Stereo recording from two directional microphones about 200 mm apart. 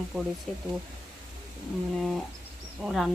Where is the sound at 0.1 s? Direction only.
5° right (ahead or behind).